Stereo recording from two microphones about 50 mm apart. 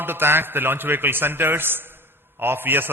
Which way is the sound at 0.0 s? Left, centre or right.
Right.